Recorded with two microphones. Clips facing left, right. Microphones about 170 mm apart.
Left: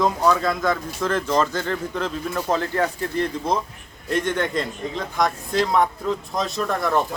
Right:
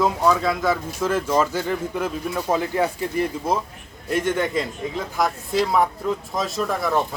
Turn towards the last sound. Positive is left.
turn(degrees=0)  # may be behind; listen again after turning